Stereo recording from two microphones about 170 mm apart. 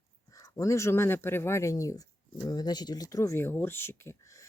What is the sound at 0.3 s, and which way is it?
Speech, 20° left (ahead or behind).